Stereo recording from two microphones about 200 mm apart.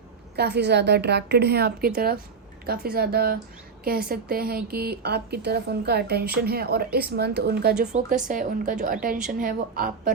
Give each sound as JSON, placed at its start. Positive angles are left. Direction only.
{"t": 0.3, "sound": "a woman's voice", "side_deg": -55}
{"t": 2.9, "sound": "a woman's voice", "side_deg": -50}
{"t": 7.9, "sound": "a woman's voice", "side_deg": -40}